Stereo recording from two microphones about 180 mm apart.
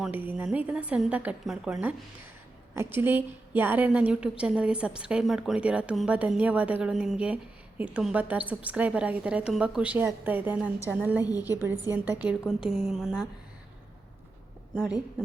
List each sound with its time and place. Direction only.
0.0 s a woman's voice: 10° right (ahead or behind)
11.3 s a woman's voice: 20° left (ahead or behind)
11.6 s a woman's voice: 10° right (ahead or behind)
14.8 s a woman's voice: 5° right (ahead or behind)